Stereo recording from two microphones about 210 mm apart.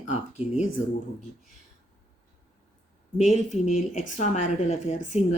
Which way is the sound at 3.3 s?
35° left (ahead or behind).